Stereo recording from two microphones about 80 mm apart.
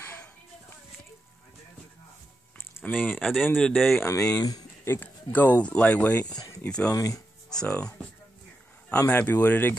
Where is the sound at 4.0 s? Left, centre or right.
Left.